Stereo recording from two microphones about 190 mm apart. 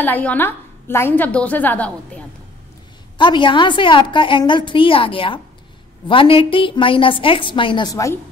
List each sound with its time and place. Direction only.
0.0 s a woman's voice: 10° left (ahead or behind)
3.2 s a woman's voice: 25° left (ahead or behind)